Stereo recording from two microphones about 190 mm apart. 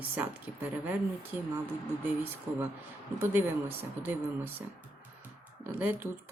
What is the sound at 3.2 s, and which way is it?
Speech, 10° right (ahead or behind).